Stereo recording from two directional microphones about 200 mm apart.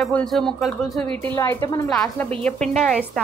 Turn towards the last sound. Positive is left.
turn(degrees=0)  # may be behind; listen again after turning